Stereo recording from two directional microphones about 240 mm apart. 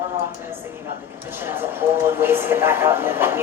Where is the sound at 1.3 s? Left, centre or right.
Centre.